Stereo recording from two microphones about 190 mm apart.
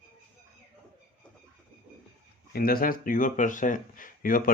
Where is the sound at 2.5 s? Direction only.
50° left (ahead or behind).